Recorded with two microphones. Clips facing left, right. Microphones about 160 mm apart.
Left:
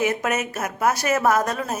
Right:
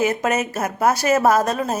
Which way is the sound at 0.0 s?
30° right (ahead or behind).